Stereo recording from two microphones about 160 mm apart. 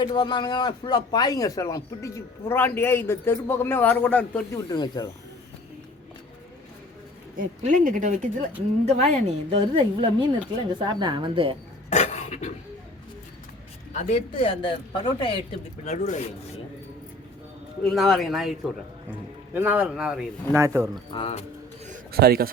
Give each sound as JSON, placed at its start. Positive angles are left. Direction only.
{"t": 0.0, "sound": "speech", "side_deg": 30}
{"t": 4.7, "sound": "speech", "side_deg": 30}
{"t": 7.3, "sound": "a woman's voice", "side_deg": -55}
{"t": 11.9, "sound": "a sound", "side_deg": 45}
{"t": 13.9, "sound": "speech", "side_deg": 45}
{"t": 15.8, "sound": "speech", "side_deg": 50}
{"t": 17.8, "sound": "a man's voice", "side_deg": 0}
{"t": 20.5, "sound": "speech", "side_deg": -15}
{"t": 21.1, "sound": "speech", "side_deg": 35}
{"t": 22.1, "sound": "a man's voice", "side_deg": -75}